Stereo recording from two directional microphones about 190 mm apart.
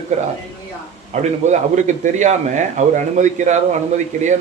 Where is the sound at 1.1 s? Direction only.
40° right (ahead or behind).